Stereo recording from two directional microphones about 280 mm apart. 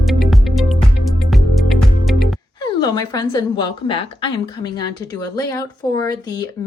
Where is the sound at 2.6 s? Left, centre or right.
Centre.